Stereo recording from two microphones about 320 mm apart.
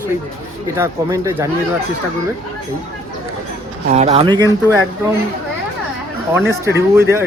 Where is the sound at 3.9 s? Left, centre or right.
Centre.